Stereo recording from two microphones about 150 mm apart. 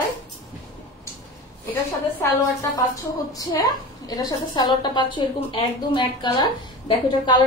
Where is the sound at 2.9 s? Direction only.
25° left (ahead or behind).